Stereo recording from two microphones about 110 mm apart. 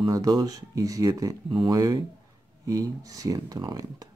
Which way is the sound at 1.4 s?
50° right (ahead or behind).